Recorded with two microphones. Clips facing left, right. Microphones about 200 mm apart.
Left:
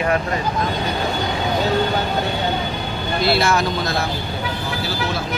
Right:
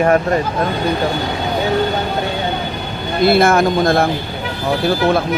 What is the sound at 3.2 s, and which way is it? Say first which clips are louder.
Speech: right 7 dB; 50° right (ahead or behind).